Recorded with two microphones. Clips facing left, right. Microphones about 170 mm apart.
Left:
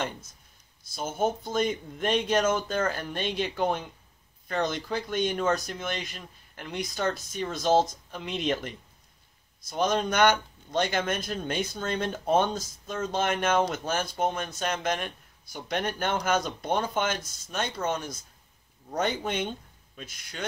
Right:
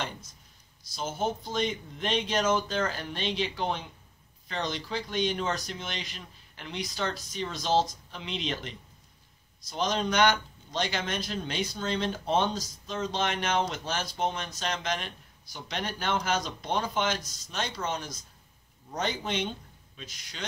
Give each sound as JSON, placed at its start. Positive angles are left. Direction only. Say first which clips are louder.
{"t": 0.9, "sound": "speech", "louder": "left 3 dB", "side_deg": 50}